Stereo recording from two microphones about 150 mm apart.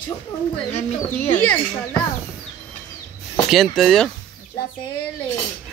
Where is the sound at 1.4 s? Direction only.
10° left (ahead or behind).